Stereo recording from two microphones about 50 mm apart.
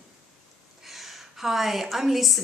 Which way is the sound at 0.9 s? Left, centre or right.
Centre.